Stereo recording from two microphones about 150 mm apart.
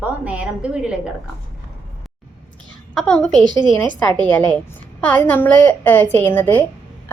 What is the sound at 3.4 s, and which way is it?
Speech, 30° right (ahead or behind).